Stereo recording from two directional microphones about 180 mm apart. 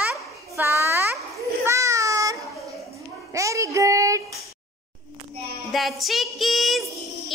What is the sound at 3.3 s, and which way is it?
Child singing, 15° right (ahead or behind).